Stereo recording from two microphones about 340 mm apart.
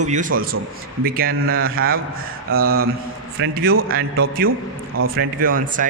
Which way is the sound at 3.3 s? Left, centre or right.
Right.